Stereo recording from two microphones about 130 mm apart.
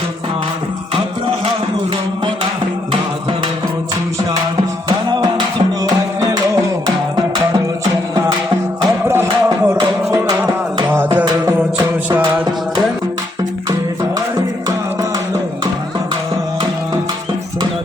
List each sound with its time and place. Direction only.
5.8 s music: 30° right (ahead or behind)
9.0 s music: 20° right (ahead or behind)
10.9 s music: 15° right (ahead or behind)
11.3 s music: 25° right (ahead or behind)